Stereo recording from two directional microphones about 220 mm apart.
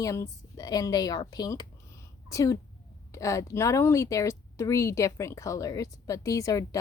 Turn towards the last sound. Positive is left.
turn(degrees=15)  # may be behind; listen again after turning